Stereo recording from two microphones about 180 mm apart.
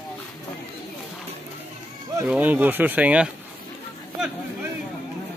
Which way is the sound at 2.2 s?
10° right (ahead or behind).